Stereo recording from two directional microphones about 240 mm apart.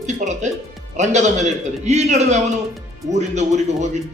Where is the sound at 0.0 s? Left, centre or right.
Right.